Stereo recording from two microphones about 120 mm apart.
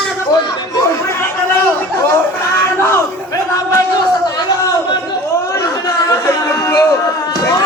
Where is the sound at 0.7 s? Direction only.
25° left (ahead or behind).